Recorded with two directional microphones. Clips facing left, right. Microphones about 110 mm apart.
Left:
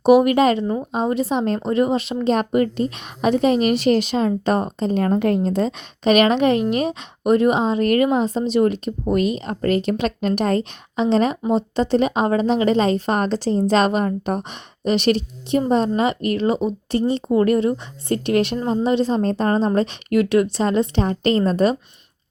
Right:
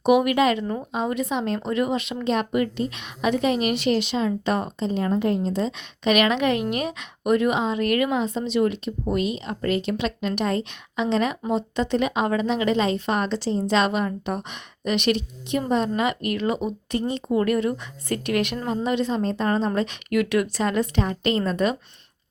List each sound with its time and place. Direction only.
0.0 s speech: 35° left (ahead or behind); by 5.7 s 55° left (ahead or behind)
6.1 s speech: 35° left (ahead or behind)